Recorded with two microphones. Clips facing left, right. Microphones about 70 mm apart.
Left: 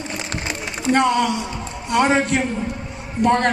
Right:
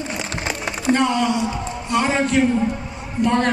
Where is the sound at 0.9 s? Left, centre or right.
Left.